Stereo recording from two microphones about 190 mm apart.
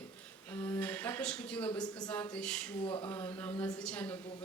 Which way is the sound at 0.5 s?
10° left (ahead or behind).